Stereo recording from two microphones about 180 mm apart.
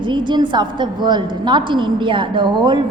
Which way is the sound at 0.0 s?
25° right (ahead or behind).